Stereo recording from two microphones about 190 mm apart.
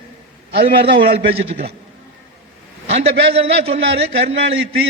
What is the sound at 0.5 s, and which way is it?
Speech, 60° right (ahead or behind).